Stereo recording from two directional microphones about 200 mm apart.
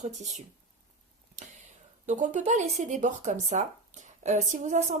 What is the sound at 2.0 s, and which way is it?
Speech, 40° right (ahead or behind).